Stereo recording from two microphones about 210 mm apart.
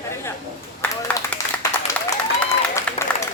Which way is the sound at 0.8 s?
5° left (ahead or behind).